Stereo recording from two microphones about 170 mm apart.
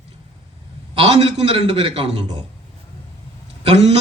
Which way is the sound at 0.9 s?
35° right (ahead or behind).